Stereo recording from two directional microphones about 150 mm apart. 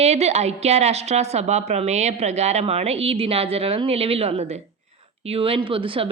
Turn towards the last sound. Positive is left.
turn(degrees=-35)  # may be behind; listen again after turning